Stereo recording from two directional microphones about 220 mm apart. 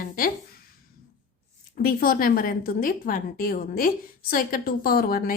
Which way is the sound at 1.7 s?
40° left (ahead or behind).